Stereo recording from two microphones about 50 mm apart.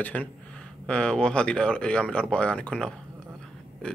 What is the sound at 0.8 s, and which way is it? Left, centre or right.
Speech, centre.